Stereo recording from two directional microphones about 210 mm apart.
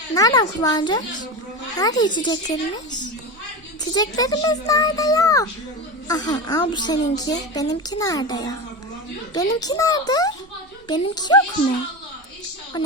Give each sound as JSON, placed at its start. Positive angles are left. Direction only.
{"t": 0.1, "sound": "a child's voice", "side_deg": 20}